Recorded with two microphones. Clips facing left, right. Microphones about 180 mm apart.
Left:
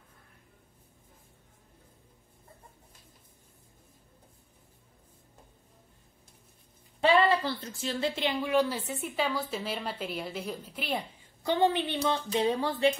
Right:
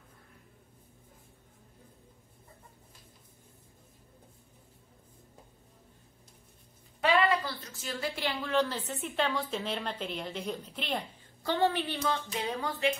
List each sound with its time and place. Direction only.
7.0 s a woman's voice: 30° left (ahead or behind)